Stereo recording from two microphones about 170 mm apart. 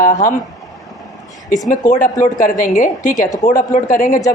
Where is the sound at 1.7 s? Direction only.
50° left (ahead or behind).